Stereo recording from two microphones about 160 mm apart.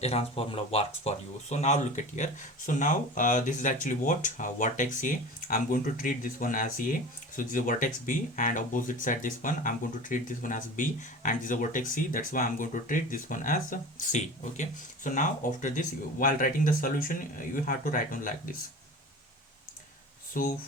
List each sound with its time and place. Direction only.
0.0 s speech: 40° left (ahead or behind); by 18.5 s 60° left (ahead or behind)
20.4 s speech: 55° left (ahead or behind)